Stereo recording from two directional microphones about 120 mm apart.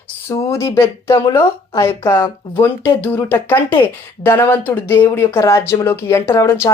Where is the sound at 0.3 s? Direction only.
25° left (ahead or behind).